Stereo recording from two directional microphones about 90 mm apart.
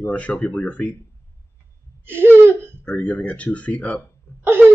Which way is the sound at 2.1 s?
25° right (ahead or behind).